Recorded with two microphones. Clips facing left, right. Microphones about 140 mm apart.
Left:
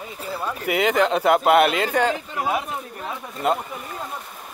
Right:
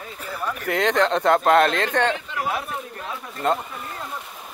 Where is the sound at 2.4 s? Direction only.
20° left (ahead or behind).